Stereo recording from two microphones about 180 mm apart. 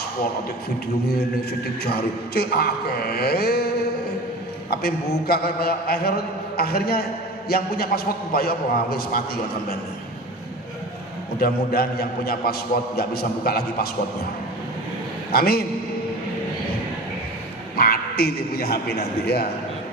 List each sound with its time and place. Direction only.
1.8 s a man's voice: 60° left (ahead or behind)
4.7 s a man's voice: 60° left (ahead or behind)
11.3 s a man's voice: 55° left (ahead or behind)
15.3 s a man's voice: 60° left (ahead or behind)
17.7 s a man's voice: 60° left (ahead or behind)